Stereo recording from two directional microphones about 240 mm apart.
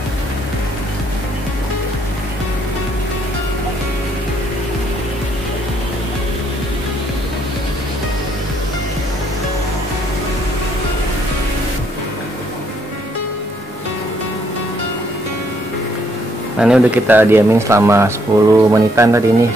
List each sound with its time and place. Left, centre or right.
16.5 s speech: centre